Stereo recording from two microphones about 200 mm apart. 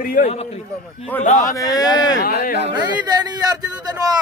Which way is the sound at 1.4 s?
15° left (ahead or behind).